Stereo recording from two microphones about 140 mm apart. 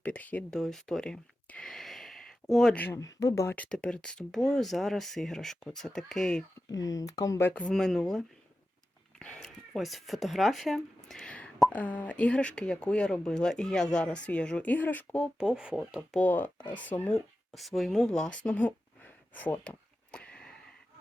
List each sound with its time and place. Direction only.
0.0 s a sound: 10° left (ahead or behind)
2.8 s speech: 20° left (ahead or behind); by 6.4 s 5° left (ahead or behind)
6.7 s speech: 25° left (ahead or behind); by 15.3 s 10° left (ahead or behind)
15.4 s speech: 5° right (ahead or behind)
16.1 s speech: 10° left (ahead or behind)
17.2 s a sound: centre (ahead or behind)